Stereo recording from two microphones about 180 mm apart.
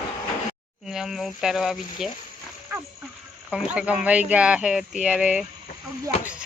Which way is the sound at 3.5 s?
5° right (ahead or behind).